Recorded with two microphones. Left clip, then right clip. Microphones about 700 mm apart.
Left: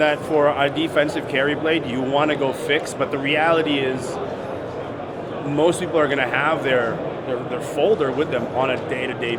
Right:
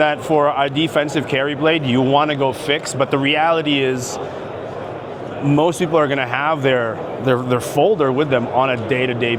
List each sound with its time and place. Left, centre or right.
0.0 s speech: right
5.5 s speech: right